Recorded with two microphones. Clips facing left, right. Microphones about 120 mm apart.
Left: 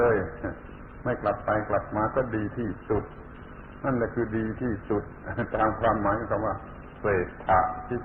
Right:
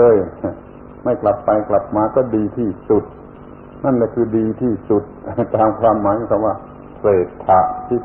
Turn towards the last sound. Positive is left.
turn(degrees=-45)  # may be behind; listen again after turning